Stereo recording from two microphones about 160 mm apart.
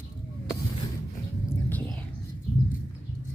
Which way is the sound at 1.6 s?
10° left (ahead or behind).